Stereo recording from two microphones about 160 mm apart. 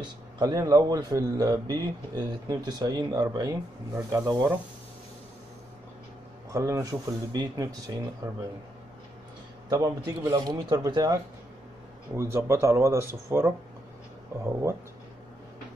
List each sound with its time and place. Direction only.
0.4 s a man's voice: 25° right (ahead or behind)
6.5 s a man's voice: 20° right (ahead or behind)
9.7 s a man's voice: 20° right (ahead or behind)
12.2 s speech: 15° right (ahead or behind)